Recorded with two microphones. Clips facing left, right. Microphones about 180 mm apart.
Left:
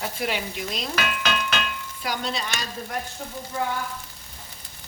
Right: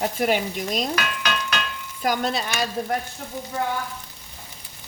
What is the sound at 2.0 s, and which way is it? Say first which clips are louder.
Frying: right 6 dB; 50° right (ahead or behind).